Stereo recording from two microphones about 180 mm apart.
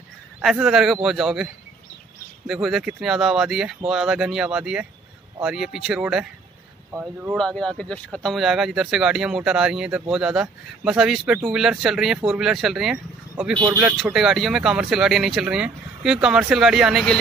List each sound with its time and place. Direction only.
0.4 s speech: centre (ahead or behind)
7.3 s speech: 5° left (ahead or behind)
13.6 s speech: 20° right (ahead or behind)
13.8 s speech: 5° right (ahead or behind)